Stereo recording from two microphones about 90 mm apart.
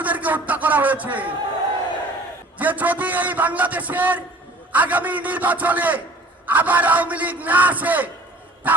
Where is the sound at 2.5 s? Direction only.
20° right (ahead or behind).